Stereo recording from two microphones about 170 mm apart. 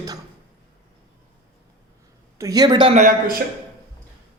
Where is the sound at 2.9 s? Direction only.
50° right (ahead or behind).